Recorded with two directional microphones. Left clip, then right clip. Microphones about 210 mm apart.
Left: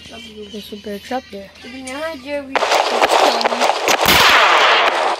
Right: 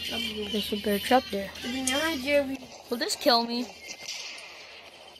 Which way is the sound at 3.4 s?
50° left (ahead or behind).